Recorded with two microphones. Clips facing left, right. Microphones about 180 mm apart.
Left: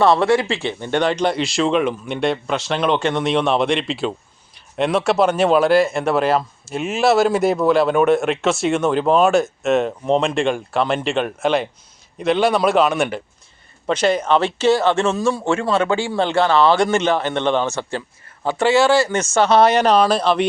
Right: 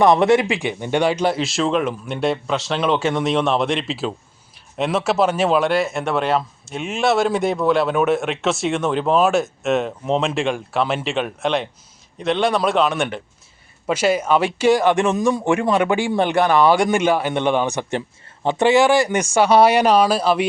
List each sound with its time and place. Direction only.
0.0 s speech: 20° right (ahead or behind)